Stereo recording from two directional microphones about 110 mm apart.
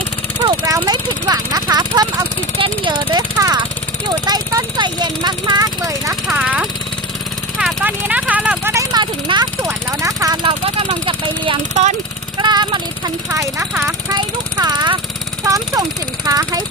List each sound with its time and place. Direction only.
0.4 s speech: 35° right (ahead or behind)
3.3 s speech: 30° right (ahead or behind)
4.8 s speech: 40° right (ahead or behind)
6.3 s speech: 10° right (ahead or behind)
7.9 s speech: 15° right (ahead or behind)
8.7 s speech: 30° right (ahead or behind)
9.0 s speech: 45° right (ahead or behind)
10.0 s speech: 30° right (ahead or behind)
10.4 s speech: 50° right (ahead or behind)
11.7 s speech: 90° right
12.4 s speech: 40° right (ahead or behind)
13.3 s speech: 30° right (ahead or behind)